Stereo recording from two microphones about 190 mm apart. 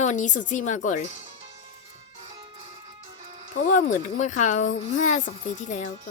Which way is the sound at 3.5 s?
45° left (ahead or behind).